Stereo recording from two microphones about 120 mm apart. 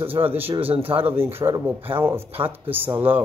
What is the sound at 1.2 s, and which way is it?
Speech, 20° right (ahead or behind).